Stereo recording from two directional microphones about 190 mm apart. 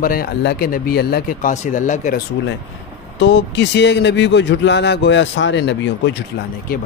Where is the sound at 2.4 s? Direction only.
65° left (ahead or behind).